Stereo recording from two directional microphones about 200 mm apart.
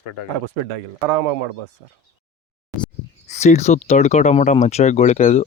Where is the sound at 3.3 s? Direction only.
35° left (ahead or behind).